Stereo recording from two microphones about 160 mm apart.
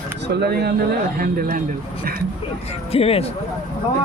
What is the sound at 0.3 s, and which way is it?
Speech, 85° right.